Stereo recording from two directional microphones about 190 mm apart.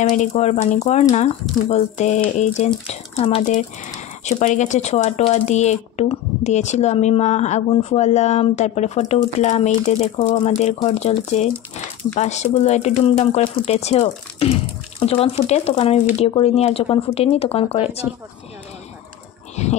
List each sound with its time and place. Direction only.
0.1 s speech: 40° left (ahead or behind)
19.5 s speech: 35° left (ahead or behind)